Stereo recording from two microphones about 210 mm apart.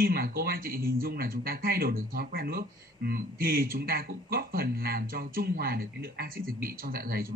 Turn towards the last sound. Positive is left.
turn(degrees=-45)  # may be behind; listen again after turning